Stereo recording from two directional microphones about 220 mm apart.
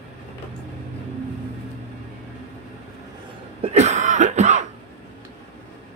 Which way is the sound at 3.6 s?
30° right (ahead or behind).